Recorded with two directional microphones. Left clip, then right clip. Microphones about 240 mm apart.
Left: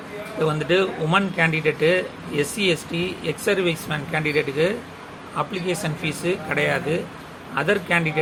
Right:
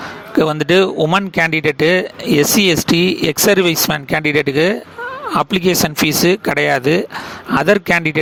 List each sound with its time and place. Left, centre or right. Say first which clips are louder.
0.4 s speech: right 6 dB; right